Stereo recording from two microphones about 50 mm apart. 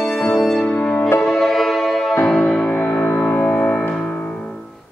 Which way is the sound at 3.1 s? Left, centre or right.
Left.